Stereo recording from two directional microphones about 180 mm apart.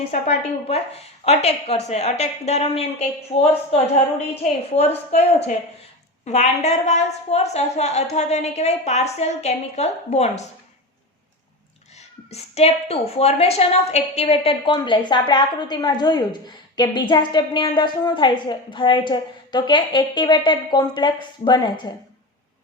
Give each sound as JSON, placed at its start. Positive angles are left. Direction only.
{"t": 0.1, "sound": "a woman's voice", "side_deg": 35}
{"t": 4.7, "sound": "a woman's voice", "side_deg": 35}
{"t": 12.3, "sound": "a woman's voice", "side_deg": 35}